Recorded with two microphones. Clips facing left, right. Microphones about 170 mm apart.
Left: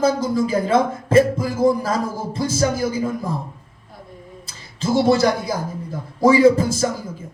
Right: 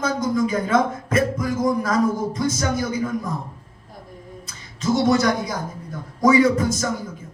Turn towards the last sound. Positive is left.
turn(degrees=30)  # may be behind; listen again after turning